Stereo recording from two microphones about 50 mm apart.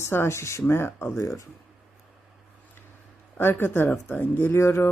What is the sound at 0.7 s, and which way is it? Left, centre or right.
Speech, left.